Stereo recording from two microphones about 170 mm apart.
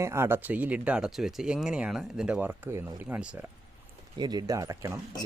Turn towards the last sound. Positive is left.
turn(degrees=-15)  # may be behind; listen again after turning